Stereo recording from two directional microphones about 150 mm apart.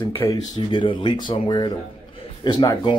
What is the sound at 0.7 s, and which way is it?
Speech, 35° left (ahead or behind).